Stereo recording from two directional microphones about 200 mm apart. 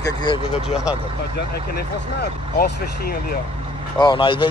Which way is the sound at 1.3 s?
55° left (ahead or behind).